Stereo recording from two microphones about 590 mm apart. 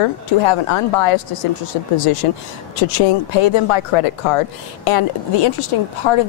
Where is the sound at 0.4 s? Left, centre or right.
Left.